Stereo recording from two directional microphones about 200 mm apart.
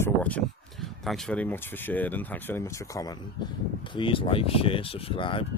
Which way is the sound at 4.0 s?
25° left (ahead or behind).